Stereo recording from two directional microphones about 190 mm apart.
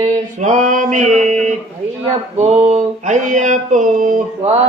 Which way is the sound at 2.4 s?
35° right (ahead or behind).